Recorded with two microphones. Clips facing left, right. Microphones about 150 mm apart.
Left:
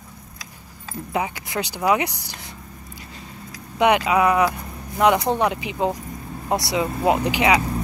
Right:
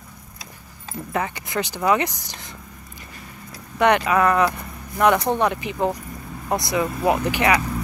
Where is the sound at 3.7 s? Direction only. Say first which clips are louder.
Even; 10° left (ahead or behind).